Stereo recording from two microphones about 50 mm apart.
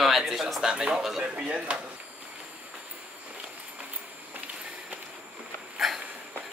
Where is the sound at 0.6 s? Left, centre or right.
Centre.